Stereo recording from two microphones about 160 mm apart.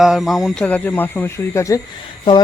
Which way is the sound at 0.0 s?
Centre (ahead or behind).